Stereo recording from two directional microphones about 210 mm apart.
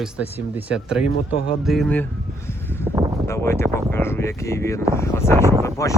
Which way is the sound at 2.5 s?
10° left (ahead or behind).